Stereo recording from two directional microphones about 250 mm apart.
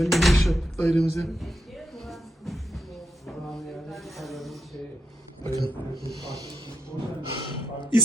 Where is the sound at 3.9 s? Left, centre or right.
Centre.